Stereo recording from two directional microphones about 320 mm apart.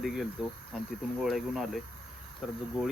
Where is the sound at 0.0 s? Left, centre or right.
Centre.